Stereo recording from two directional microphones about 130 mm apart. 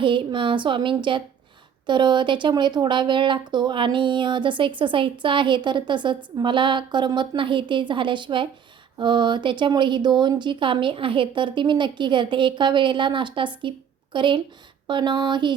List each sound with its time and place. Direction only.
0.0 s speech: 40° right (ahead or behind)